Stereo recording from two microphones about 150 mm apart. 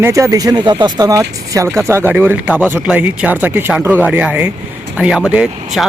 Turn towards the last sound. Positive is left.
turn(degrees=-5)  # may be behind; listen again after turning